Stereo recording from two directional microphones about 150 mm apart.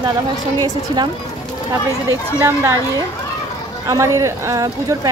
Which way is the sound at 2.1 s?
20° right (ahead or behind).